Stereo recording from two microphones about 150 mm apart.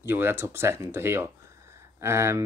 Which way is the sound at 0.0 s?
15° right (ahead or behind).